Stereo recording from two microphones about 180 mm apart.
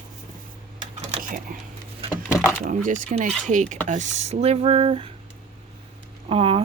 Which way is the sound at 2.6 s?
45° right (ahead or behind).